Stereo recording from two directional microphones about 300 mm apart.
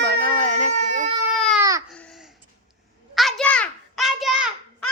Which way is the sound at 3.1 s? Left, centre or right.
Centre.